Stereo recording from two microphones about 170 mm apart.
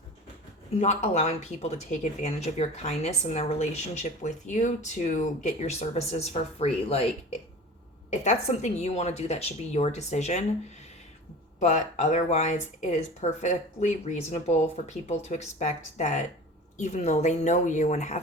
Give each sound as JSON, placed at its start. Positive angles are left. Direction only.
{"t": 0.7, "sound": "speech", "side_deg": 40}
{"t": 8.1, "sound": "speech", "side_deg": 45}
{"t": 11.6, "sound": "speech", "side_deg": 45}